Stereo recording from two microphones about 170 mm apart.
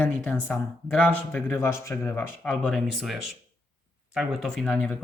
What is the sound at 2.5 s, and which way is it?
Speech, centre (ahead or behind).